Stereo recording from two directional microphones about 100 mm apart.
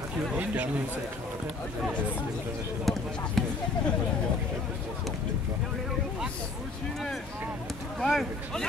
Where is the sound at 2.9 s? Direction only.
Centre (ahead or behind).